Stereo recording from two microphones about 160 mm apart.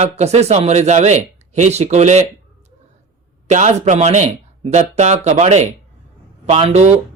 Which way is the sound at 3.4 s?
45° right (ahead or behind).